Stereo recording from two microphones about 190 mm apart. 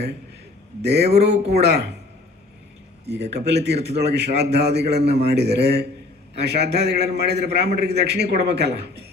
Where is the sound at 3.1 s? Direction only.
60° right (ahead or behind).